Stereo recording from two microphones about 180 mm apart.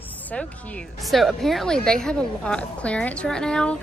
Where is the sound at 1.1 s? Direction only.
Centre (ahead or behind).